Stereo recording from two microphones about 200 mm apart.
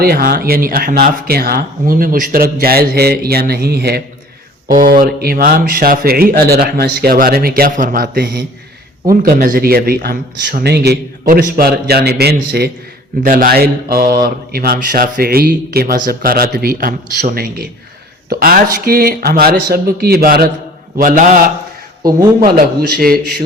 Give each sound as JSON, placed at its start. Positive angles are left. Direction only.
{"t": 0.0, "sound": "speech", "side_deg": -50}
{"t": 20.9, "sound": "mantra", "side_deg": -40}
{"t": 23.0, "sound": "speech", "side_deg": -50}